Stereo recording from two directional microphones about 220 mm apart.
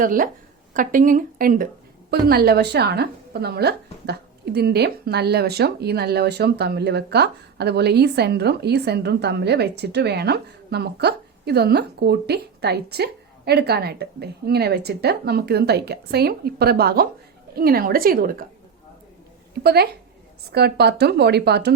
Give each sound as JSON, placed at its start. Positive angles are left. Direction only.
{"t": 0.0, "sound": "a woman's voice", "side_deg": -40}
{"t": 19.6, "sound": "a woman's voice", "side_deg": -45}